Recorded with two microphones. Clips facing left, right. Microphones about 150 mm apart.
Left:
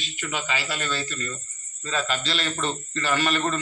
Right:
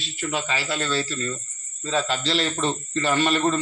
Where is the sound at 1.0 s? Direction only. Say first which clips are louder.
Right 4 dB; 30° right (ahead or behind).